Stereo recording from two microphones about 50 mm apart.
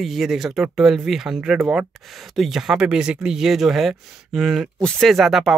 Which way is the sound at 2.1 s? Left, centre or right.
Centre.